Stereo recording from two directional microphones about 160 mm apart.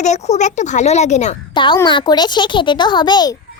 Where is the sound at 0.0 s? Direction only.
45° left (ahead or behind).